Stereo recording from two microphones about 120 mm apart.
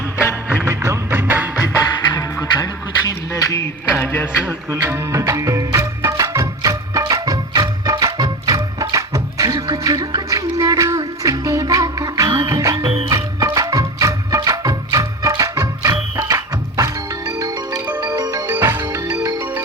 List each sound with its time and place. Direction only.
0.4 s music: 20° right (ahead or behind)
1.6 s music: 35° left (ahead or behind)
3.1 s a sound: 30° left (ahead or behind)
3.9 s a sound: 20° left (ahead or behind)
4.4 s music: 20° right (ahead or behind)
18.2 s music: 30° right (ahead or behind)
18.4 s music: 20° right (ahead or behind)